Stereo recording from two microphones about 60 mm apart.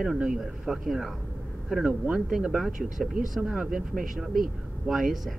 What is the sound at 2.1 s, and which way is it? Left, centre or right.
Speech, centre.